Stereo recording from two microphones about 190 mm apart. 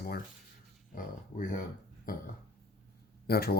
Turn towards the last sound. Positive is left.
turn(degrees=55)  # may be behind; listen again after turning